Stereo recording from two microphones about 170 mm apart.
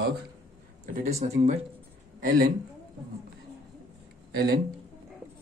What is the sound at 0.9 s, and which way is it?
Speech, 40° right (ahead or behind).